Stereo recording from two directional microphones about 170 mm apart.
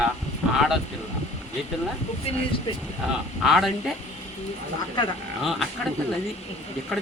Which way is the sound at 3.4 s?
Centre (ahead or behind).